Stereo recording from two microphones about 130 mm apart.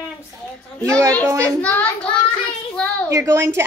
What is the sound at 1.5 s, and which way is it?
Speech, 10° left (ahead or behind).